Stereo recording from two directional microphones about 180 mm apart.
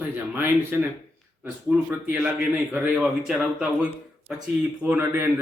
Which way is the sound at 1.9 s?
5° right (ahead or behind).